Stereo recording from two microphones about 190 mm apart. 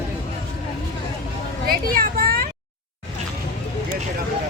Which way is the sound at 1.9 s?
50° right (ahead or behind).